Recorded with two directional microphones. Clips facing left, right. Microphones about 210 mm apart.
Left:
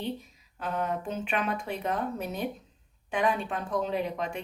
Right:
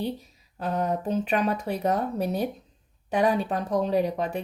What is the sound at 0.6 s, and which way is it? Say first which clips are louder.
A woman's voice: right 4 dB; 40° right (ahead or behind).